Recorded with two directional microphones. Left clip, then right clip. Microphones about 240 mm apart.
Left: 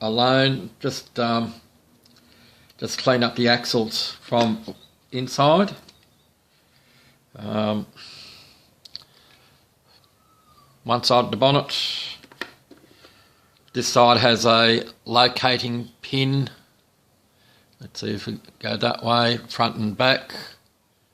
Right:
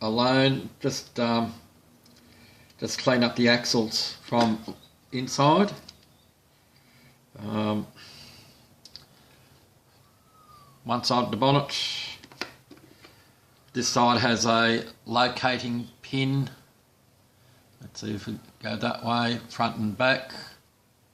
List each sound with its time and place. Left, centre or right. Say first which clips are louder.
0.0 s speech: left 4 dB; left
2.8 s speech: left 4 dB; left
7.3 s speech: left 5 dB; left
10.8 s speech: left 7 dB; left
13.7 s speech: left 6 dB; left
17.9 s speech: left 6 dB; left